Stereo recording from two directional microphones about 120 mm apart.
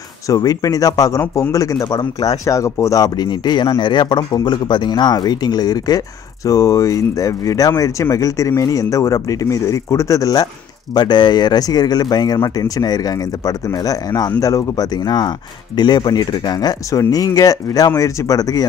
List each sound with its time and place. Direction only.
0.3 s speech: 30° left (ahead or behind)